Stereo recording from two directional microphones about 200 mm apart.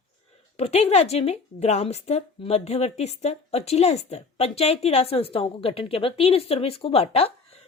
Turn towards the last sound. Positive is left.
turn(degrees=30)  # may be behind; listen again after turning